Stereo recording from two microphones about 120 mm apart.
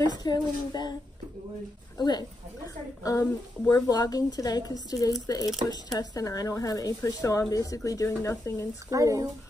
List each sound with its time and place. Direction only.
0.2 s a woman's voice: 35° left (ahead or behind)
2.0 s speech: 35° left (ahead or behind)
3.0 s a woman's voice: 25° left (ahead or behind)
8.9 s speech: 25° right (ahead or behind)